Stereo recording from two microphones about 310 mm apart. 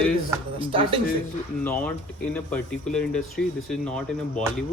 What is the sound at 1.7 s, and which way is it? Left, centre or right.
A man's voice, centre.